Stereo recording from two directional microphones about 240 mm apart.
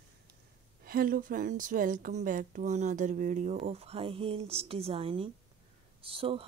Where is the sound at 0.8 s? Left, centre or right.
Right.